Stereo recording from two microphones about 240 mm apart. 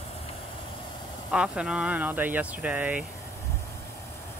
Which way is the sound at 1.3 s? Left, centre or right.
Centre.